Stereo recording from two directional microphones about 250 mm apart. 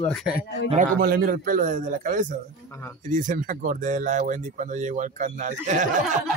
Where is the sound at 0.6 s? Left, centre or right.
Right.